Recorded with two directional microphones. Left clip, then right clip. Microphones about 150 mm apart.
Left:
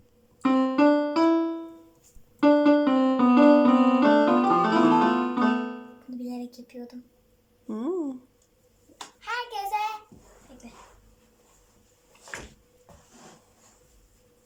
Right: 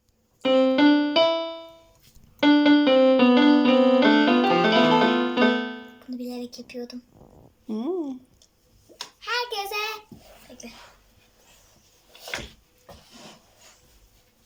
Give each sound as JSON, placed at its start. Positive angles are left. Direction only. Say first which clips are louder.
{"t": 0.4, "sound": "keyboard", "louder": "right 3 dB", "side_deg": -15}
{"t": 6.1, "sound": "a sound", "louder": "right 2 dB", "side_deg": 0}
{"t": 9.2, "sound": "child singing", "louder": "right 3 dB", "side_deg": -5}